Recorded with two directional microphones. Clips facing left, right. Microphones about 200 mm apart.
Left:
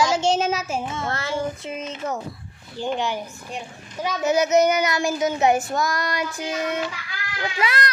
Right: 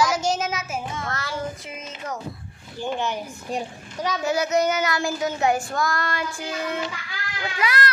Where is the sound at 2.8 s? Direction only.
10° right (ahead or behind).